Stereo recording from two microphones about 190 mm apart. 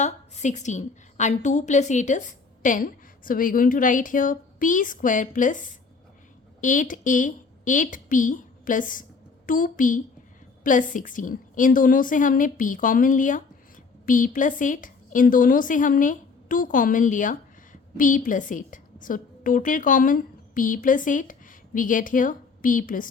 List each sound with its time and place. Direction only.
0.0 s a woman's voice: 40° left (ahead or behind)